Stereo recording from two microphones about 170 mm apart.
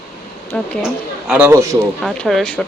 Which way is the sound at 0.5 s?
5° left (ahead or behind).